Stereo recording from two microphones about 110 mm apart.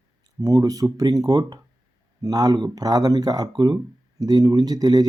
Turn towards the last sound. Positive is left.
turn(degrees=-35)  # may be behind; listen again after turning